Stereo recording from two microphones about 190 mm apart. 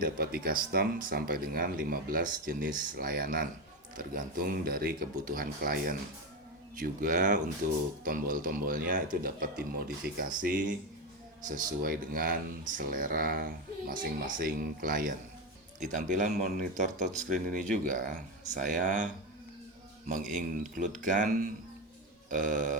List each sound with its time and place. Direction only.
0.0 s speech: 50° right (ahead or behind)
20.1 s speech: 45° right (ahead or behind)